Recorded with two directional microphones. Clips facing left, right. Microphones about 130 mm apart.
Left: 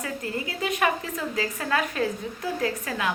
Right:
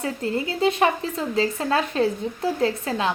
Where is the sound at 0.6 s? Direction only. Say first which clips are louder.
Right 5 dB; 30° right (ahead or behind).